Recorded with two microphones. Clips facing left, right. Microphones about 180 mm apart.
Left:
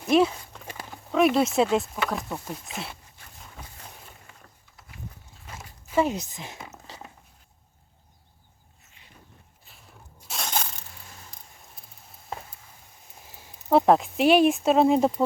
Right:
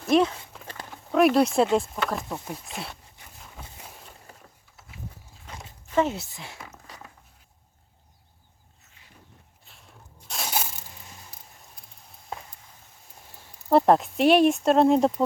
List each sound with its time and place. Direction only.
0.1 s horse: 5° left (ahead or behind)
0.7 s a sound: 5° left (ahead or behind)
1.7 s speech: centre (ahead or behind)
3.3 s a sound: 5° right (ahead or behind)
4.8 s walk: centre (ahead or behind)
5.9 s zipper: 10° left (ahead or behind)
9.6 s crushing: centre (ahead or behind)
13.2 s speech: centre (ahead or behind)